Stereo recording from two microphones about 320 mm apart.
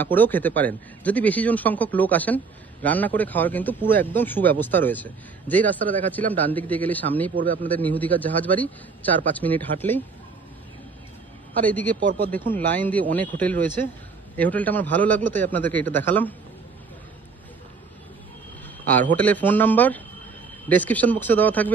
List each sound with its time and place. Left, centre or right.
0.0 s a man's voice: centre
11.6 s a man's voice: centre
18.9 s a man's voice: centre